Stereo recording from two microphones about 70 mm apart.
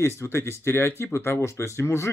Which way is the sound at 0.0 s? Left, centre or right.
Left.